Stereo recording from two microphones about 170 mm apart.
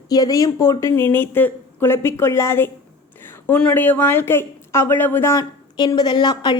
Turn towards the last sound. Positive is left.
turn(degrees=25)  # may be behind; listen again after turning